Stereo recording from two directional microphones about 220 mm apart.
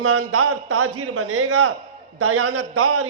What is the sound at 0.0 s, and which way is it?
A man's voice, 90° right.